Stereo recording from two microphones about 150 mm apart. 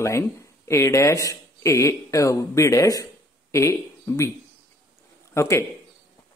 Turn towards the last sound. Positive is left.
turn(degrees=20)  # may be behind; listen again after turning